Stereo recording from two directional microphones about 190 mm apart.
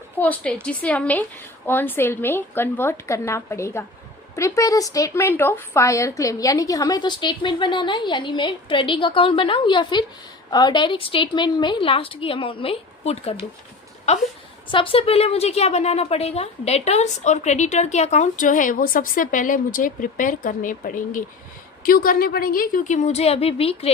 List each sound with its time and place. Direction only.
0.2 s a woman's voice: 5° left (ahead or behind); by 23.9 s 30° left (ahead or behind)